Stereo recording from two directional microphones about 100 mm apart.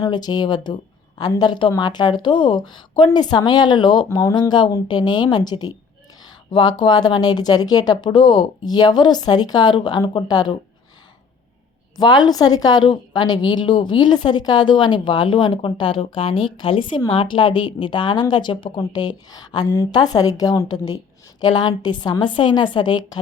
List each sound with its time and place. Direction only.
0.0 s a woman's voice: 45° left (ahead or behind)
4.1 s a woman's voice: 30° left (ahead or behind)
4.4 s a woman's voice: 50° left (ahead or behind)
11.9 s a woman's voice: 45° left (ahead or behind)